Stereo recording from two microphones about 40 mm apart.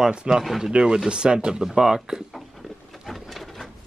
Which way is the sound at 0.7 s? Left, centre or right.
Right.